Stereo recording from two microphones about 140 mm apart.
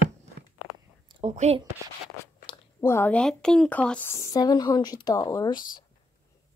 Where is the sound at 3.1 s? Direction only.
5° left (ahead or behind); by 5.6 s 30° left (ahead or behind).